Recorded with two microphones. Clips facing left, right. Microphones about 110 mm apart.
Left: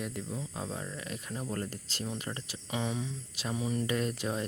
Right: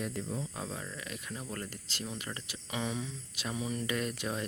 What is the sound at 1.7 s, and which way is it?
Speech, 40° left (ahead or behind).